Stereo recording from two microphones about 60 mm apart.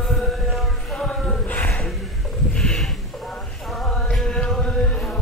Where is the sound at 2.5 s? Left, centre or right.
Centre.